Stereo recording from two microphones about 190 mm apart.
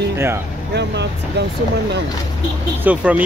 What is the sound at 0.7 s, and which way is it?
Speech, 65° right (ahead or behind).